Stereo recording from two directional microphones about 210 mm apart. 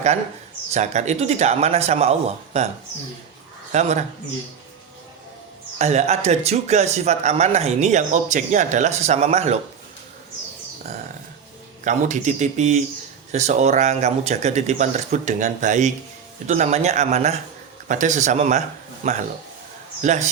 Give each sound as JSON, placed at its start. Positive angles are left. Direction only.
{"t": 0.7, "sound": "speech", "side_deg": -35}
{"t": 3.7, "sound": "speech", "side_deg": -35}
{"t": 5.8, "sound": "speech", "side_deg": -30}
{"t": 11.9, "sound": "speech", "side_deg": -35}